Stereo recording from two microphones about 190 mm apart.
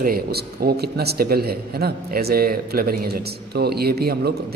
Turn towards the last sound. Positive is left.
turn(degrees=-55)  # may be behind; listen again after turning